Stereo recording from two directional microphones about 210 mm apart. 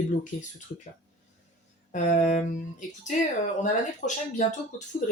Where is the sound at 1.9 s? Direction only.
40° left (ahead or behind).